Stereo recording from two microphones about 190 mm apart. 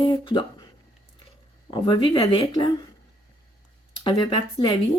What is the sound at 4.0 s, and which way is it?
Speech, 25° left (ahead or behind).